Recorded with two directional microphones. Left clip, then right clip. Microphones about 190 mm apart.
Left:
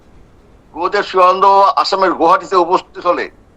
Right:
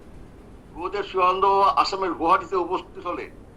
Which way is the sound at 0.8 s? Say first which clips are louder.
Left 11 dB; 65° left (ahead or behind).